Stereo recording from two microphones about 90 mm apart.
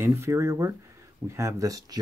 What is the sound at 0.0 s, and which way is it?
Speech, 30° right (ahead or behind).